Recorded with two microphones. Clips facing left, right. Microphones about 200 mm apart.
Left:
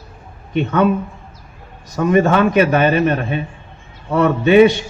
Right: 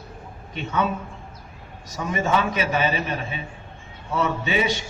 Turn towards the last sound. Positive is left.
turn(degrees=60)  # may be behind; listen again after turning